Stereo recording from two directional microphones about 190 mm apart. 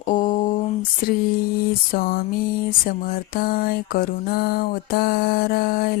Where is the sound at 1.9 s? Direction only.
50° left (ahead or behind).